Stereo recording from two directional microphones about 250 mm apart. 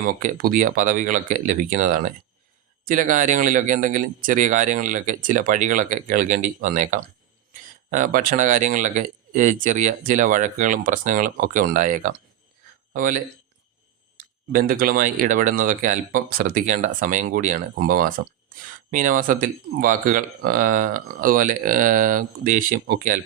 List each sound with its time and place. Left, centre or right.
0.0 s speech: right